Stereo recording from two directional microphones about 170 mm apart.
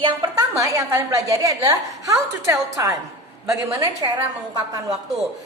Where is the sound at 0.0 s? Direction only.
25° right (ahead or behind).